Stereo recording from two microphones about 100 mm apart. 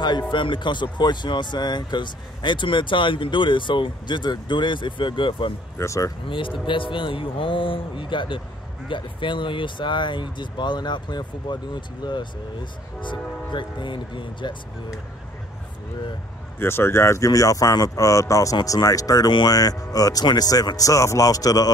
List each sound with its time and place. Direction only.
0.3 s speech: 55° left (ahead or behind)
5.8 s speech: 30° left (ahead or behind)
6.2 s speech: 60° left (ahead or behind)
16.5 s speech: 25° left (ahead or behind)